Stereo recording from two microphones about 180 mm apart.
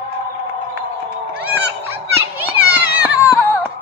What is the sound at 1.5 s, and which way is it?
Children playing, 10° right (ahead or behind).